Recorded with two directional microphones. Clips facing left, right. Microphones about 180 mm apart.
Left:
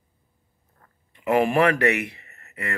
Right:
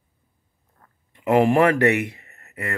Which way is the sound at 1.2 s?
50° right (ahead or behind).